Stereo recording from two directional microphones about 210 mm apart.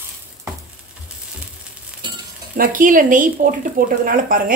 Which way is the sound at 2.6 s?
40° right (ahead or behind).